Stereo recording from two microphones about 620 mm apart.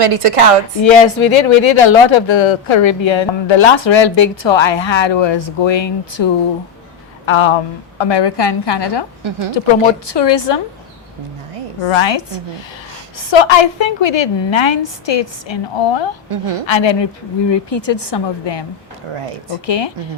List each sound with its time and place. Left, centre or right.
0.0 s a woman's voice: right
0.8 s speech: left
7.3 s a woman's voice: left
10.1 s a woman's voice: left
11.9 s speech: left
16.3 s a woman's voice: right
16.6 s a woman's voice: left
19.6 s speech: left